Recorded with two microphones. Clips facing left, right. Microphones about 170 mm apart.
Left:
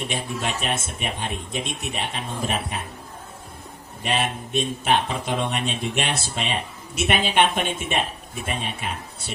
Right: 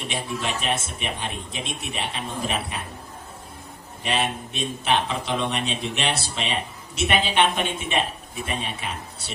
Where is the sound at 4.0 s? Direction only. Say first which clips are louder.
Even; 50° left (ahead or behind).